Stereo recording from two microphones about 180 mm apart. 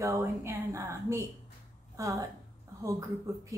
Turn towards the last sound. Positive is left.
turn(degrees=-15)  # may be behind; listen again after turning